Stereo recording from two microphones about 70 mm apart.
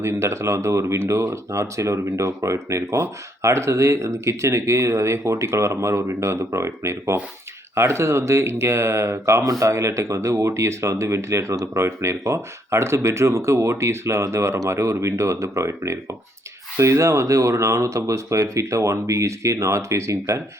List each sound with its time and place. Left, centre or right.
0.0 s speech: right